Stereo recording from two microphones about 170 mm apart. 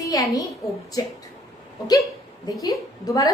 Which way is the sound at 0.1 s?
20° left (ahead or behind).